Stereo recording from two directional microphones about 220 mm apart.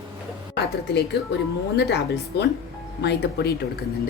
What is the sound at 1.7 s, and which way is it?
Speech, 50° left (ahead or behind).